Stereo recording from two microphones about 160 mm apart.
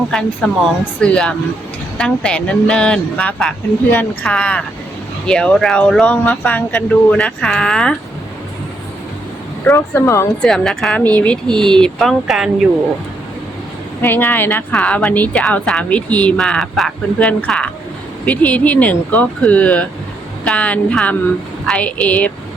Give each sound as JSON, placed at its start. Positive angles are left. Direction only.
{"t": 0.1, "sound": "a woman's voice", "side_deg": 5}
{"t": 9.6, "sound": "a woman's voice", "side_deg": 15}
{"t": 10.4, "sound": "speech", "side_deg": 5}
{"t": 14.0, "sound": "a woman's voice", "side_deg": 10}